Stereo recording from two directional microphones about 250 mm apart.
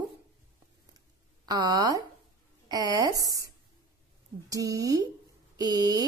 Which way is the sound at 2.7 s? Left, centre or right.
Centre.